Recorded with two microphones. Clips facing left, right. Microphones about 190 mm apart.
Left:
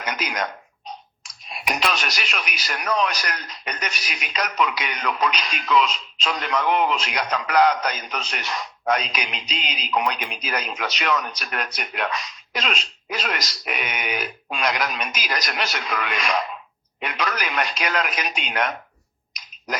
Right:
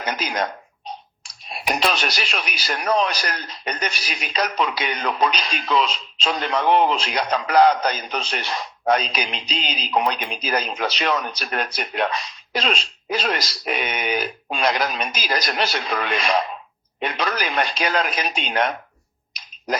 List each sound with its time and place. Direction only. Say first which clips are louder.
0.0 s speech: right 3 dB; 30° right (ahead or behind)